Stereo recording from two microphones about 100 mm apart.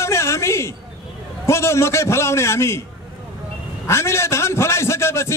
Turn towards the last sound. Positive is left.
turn(degrees=25)  # may be behind; listen again after turning